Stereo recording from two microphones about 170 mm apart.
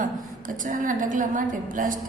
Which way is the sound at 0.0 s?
50° right (ahead or behind).